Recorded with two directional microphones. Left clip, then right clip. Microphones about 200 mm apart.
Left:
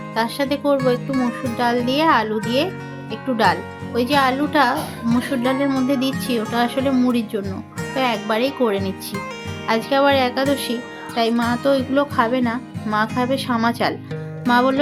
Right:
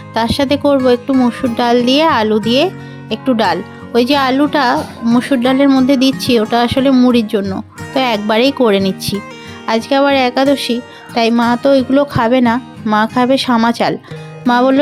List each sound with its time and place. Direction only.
0.1 s speech: 45° right (ahead or behind)